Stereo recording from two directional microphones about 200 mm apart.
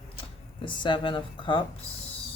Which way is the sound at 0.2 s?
25° left (ahead or behind).